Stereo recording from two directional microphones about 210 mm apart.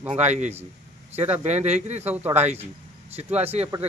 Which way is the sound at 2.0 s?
10° right (ahead or behind).